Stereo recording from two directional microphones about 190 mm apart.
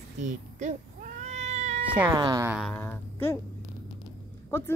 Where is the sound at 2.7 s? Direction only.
10° left (ahead or behind).